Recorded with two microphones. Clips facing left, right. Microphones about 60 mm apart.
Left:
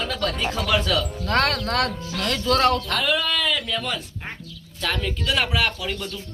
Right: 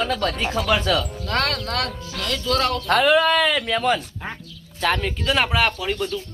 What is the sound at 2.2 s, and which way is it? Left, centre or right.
Speech, left.